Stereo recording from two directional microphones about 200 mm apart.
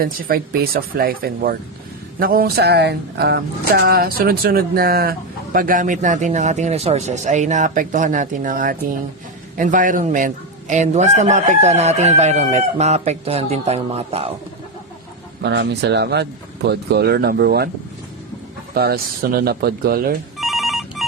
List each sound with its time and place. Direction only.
0.0 s speech: 50° right (ahead or behind)
9.6 s chicken: 40° right (ahead or behind)
15.4 s speech: 55° right (ahead or behind)
18.7 s speech: 50° right (ahead or behind)
20.4 s telephone bell ringing: centre (ahead or behind)